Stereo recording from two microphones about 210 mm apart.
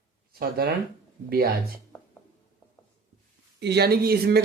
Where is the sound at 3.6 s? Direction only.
50° right (ahead or behind).